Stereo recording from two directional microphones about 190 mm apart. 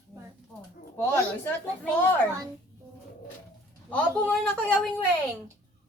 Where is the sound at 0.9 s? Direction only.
10° left (ahead or behind).